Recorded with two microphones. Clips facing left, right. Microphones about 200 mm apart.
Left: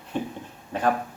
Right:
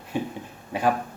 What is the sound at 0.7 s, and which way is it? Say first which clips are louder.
Speech: right 1 dB; 10° right (ahead or behind).